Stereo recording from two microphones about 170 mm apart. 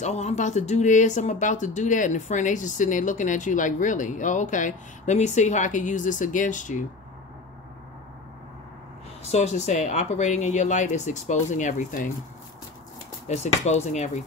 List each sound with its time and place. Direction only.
0.0 s speech: 40° left (ahead or behind)
9.2 s speech: 40° left (ahead or behind)
13.3 s speech: 40° left (ahead or behind)